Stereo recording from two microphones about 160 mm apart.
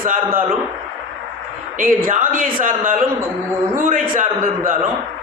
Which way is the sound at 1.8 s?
60° right (ahead or behind).